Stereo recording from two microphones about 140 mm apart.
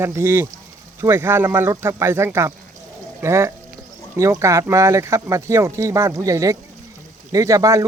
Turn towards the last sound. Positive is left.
turn(degrees=-25)  # may be behind; listen again after turning